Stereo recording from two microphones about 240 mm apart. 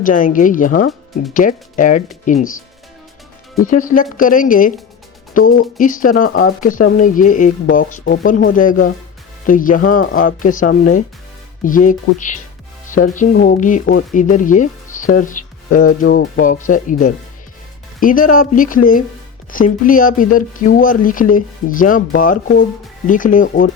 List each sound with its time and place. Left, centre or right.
0.0 s speech: left
3.7 s speech: left